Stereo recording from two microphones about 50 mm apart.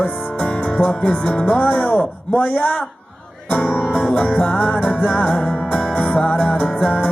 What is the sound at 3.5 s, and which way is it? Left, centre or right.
Music, left.